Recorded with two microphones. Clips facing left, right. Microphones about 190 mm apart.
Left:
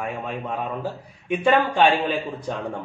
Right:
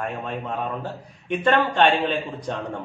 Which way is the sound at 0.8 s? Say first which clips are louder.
Left 3 dB; 10° left (ahead or behind).